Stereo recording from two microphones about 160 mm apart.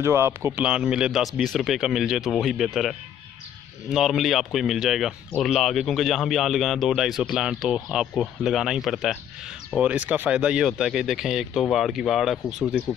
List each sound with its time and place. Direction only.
0.0 s speech: 15° right (ahead or behind); by 12.8 s centre (ahead or behind)